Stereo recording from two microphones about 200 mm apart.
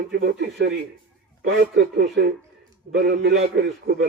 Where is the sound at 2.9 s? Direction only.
55° right (ahead or behind).